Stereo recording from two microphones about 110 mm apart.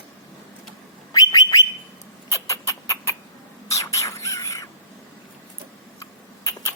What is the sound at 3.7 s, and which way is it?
Bird, 30° left (ahead or behind).